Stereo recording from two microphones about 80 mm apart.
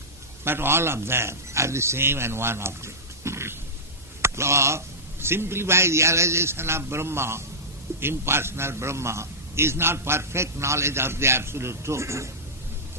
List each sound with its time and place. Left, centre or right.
0.4 s a man's voice: right